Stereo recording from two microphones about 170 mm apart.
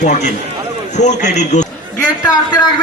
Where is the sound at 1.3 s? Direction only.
45° left (ahead or behind).